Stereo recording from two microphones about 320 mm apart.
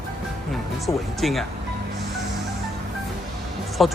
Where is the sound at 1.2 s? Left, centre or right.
Centre.